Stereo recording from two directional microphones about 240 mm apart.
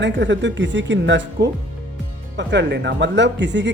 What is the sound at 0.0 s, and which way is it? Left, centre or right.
Speech, right.